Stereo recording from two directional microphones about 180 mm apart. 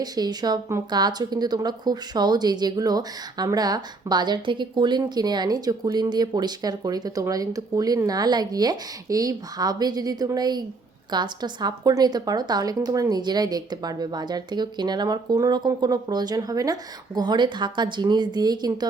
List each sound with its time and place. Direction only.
0.0 s speech: 20° right (ahead or behind)